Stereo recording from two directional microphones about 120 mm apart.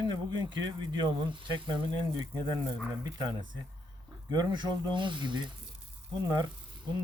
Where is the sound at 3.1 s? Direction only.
35° right (ahead or behind).